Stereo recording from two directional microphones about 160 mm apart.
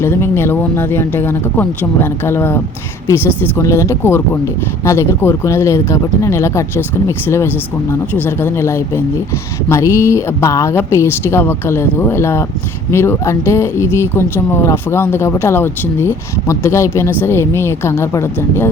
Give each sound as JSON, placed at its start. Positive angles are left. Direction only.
{"t": 0.0, "sound": "speech", "side_deg": 15}